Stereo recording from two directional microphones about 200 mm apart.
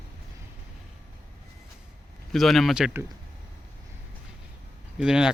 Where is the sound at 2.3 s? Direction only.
Centre (ahead or behind).